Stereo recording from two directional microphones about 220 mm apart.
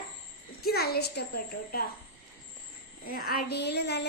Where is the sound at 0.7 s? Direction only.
45° left (ahead or behind).